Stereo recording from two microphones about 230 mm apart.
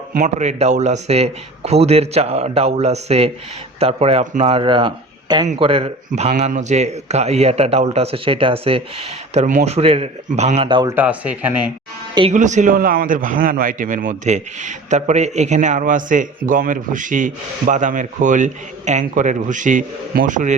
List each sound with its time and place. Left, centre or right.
0.1 s a man's voice: right
10.9 s speech: centre
12.1 s a man's voice: right